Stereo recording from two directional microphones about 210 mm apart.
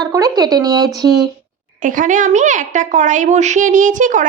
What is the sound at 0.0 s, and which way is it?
Speech, 15° right (ahead or behind).